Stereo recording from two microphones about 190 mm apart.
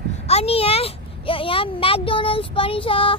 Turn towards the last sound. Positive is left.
turn(degrees=30)  # may be behind; listen again after turning